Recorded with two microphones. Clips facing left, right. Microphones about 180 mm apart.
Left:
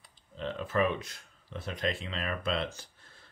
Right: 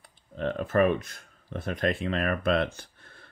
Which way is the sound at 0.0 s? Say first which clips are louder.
Right 7 dB; 55° right (ahead or behind).